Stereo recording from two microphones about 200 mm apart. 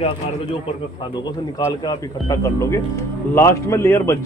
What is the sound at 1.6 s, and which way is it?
Speech, 15° left (ahead or behind).